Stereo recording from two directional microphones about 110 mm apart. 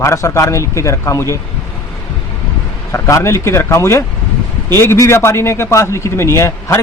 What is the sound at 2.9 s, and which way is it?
Speech, 25° left (ahead or behind).